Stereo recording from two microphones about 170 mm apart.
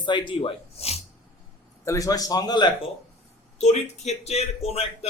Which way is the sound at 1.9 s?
20° left (ahead or behind).